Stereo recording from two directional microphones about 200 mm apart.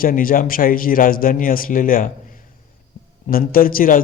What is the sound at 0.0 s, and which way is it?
A man's voice, 45° left (ahead or behind).